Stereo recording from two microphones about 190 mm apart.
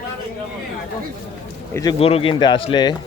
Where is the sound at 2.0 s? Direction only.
30° left (ahead or behind).